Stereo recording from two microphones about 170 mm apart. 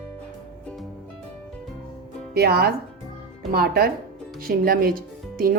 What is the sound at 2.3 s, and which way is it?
A woman's voice, 70° right (ahead or behind).